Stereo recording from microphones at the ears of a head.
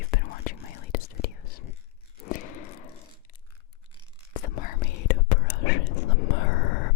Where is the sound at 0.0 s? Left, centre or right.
Left.